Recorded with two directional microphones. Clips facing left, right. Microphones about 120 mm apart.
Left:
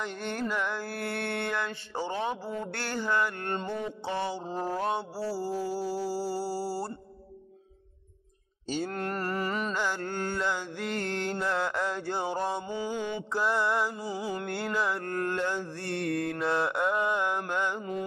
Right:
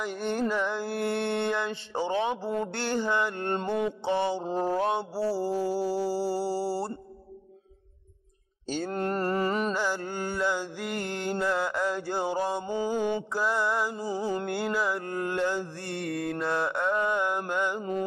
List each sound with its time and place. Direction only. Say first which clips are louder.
0.0 s mantra: right 4 dB; 10° right (ahead or behind)
3.6 s mantra: right 6 dB; 65° right (ahead or behind)
4.0 s mantra: right 5 dB; 20° right (ahead or behind)
8.6 s mantra: right 1 dB; 5° left (ahead or behind)
8.9 s mantra: right 4 dB; 25° right (ahead or behind)
9.8 s mantra: right 1 dB; 10° right (ahead or behind)
12.6 s mantra: right 5 dB; 40° right (ahead or behind)
13.3 s mantra: even; centre (ahead or behind)
14.0 s music: right 4 dB; 45° right (ahead or behind)
14.4 s mantra: right 2 dB; 5° right (ahead or behind)